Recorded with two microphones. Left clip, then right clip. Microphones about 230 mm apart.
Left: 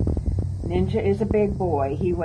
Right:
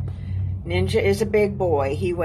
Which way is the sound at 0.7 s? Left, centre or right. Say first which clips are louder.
Right 3 dB; right.